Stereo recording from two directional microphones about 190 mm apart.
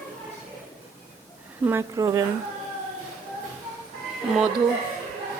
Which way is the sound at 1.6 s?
15° right (ahead or behind).